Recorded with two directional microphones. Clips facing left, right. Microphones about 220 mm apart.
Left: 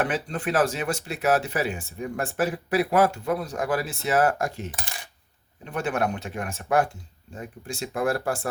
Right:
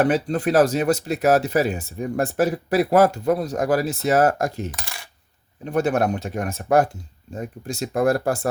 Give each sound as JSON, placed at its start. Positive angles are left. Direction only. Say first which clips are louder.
{"t": 0.0, "sound": "speech", "louder": "right 7 dB", "side_deg": -40}